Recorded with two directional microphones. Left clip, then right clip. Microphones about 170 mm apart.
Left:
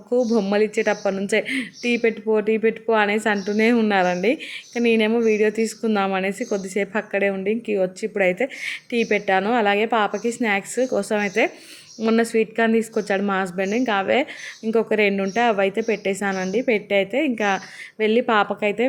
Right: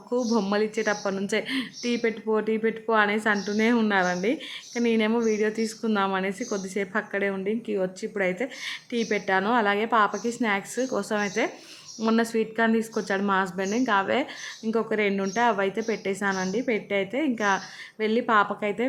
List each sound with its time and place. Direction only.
0.1 s speech: 5° left (ahead or behind)